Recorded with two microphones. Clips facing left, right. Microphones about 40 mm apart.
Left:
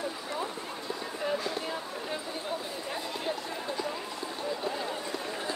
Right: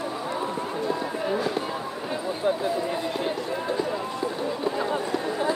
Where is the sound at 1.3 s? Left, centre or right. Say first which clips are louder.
Right 7 dB; right.